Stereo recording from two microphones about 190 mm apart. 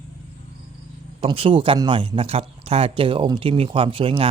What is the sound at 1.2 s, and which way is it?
Speech, 30° right (ahead or behind).